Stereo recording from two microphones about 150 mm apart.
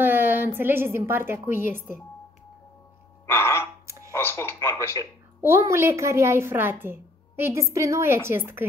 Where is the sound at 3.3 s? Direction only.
15° left (ahead or behind).